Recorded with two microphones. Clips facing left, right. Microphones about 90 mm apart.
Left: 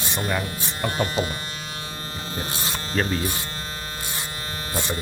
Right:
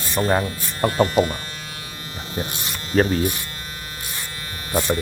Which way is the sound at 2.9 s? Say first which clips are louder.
Right 7 dB; 40° right (ahead or behind).